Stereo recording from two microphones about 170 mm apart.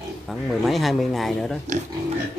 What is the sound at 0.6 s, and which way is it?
Speech, centre (ahead or behind).